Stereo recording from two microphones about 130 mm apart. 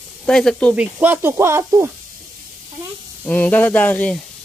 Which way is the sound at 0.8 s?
15° right (ahead or behind).